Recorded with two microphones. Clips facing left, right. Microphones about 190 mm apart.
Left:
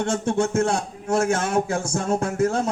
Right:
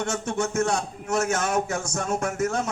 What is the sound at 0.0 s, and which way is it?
A man's voice, 30° left (ahead or behind).